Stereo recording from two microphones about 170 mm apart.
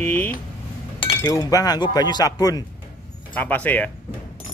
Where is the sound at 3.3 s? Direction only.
10° left (ahead or behind).